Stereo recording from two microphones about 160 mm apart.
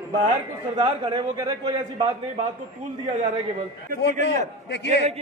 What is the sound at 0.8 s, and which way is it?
Speech, 25° right (ahead or behind).